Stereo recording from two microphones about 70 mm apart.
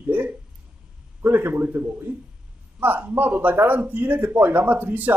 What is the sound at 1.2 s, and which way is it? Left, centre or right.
A man's voice, right.